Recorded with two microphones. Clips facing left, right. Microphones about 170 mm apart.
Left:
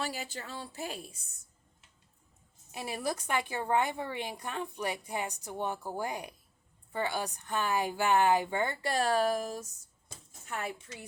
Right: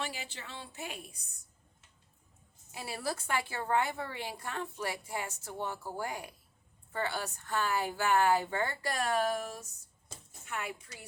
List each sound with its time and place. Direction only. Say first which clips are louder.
0.0 s a woman's voice: left 3 dB; 40° left (ahead or behind)
2.7 s a woman's voice: left 3 dB; 20° left (ahead or behind)